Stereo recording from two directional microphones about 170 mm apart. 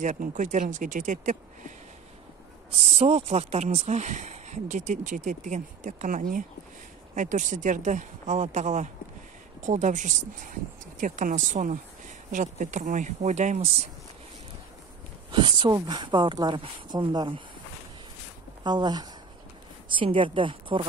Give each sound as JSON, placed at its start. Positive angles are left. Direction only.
{"t": 0.0, "sound": "speech", "side_deg": -50}
{"t": 2.8, "sound": "speech", "side_deg": -40}
{"t": 15.3, "sound": "speech", "side_deg": -25}
{"t": 18.6, "sound": "speech", "side_deg": -25}